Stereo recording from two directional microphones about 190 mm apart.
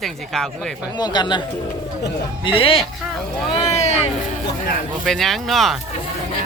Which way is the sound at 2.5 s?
30° left (ahead or behind).